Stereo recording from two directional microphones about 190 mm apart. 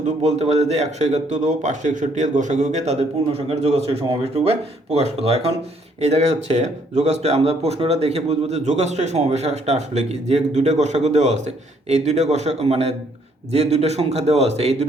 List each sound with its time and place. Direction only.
0.0 s speech: 35° right (ahead or behind)